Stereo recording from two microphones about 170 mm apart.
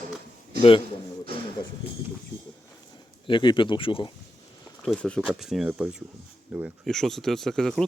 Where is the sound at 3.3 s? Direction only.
30° left (ahead or behind).